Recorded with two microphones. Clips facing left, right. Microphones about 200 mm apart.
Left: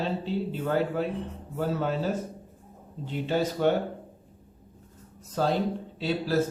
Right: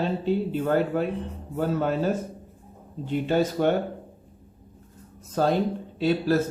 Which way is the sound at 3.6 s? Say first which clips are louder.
Even; 50° right (ahead or behind).